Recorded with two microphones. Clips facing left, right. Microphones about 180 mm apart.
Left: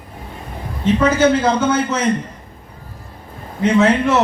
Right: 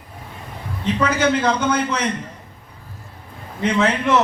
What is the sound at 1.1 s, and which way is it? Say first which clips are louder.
A man's voice: left 4 dB; 25° left (ahead or behind).